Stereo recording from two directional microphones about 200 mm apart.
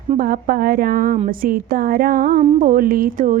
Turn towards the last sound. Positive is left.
turn(degrees=-40)  # may be behind; listen again after turning